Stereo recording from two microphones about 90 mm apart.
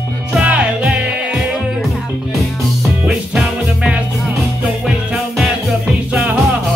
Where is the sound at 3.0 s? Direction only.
10° right (ahead or behind).